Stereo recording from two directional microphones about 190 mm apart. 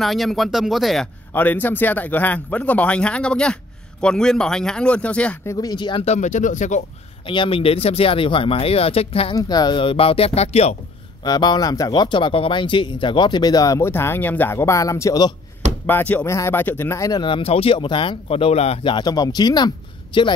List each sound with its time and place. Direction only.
0.0 s speech: centre (ahead or behind)
1.3 s a man's voice: 10° left (ahead or behind); by 6.1 s 25° left (ahead or behind)
6.1 s speech: 40° left (ahead or behind)
7.2 s speech: 25° left (ahead or behind)
9.3 s speech: 20° left (ahead or behind); by 10.8 s 35° left (ahead or behind)
11.2 s speech: 20° left (ahead or behind)
15.9 s speech: 10° left (ahead or behind); by 20.3 s 25° left (ahead or behind)